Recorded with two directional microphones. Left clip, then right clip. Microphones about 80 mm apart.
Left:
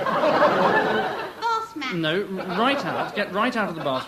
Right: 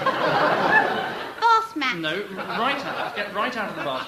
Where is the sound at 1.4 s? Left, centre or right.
Right.